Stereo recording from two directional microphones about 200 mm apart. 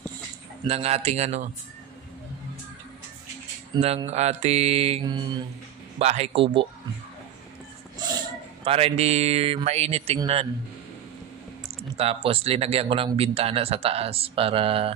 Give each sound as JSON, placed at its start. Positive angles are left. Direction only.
{"t": 0.7, "sound": "speech", "side_deg": -30}
{"t": 3.7, "sound": "speech", "side_deg": -30}
{"t": 8.6, "sound": "speech", "side_deg": -30}
{"t": 12.0, "sound": "speech", "side_deg": -30}